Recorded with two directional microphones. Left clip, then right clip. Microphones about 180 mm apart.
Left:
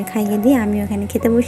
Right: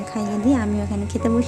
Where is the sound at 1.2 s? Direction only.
20° left (ahead or behind).